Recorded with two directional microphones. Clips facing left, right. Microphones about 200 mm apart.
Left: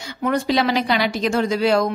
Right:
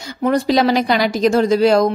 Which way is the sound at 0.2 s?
40° right (ahead or behind).